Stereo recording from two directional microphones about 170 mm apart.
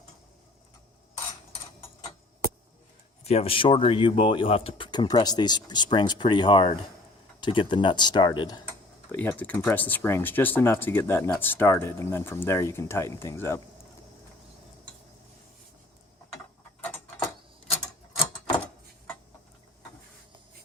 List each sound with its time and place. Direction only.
3.2 s speech: 35° left (ahead or behind)
9.1 s speech: 10° left (ahead or behind)